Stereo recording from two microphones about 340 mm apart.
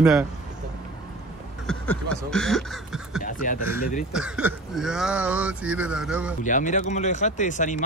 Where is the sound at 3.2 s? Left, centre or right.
Left.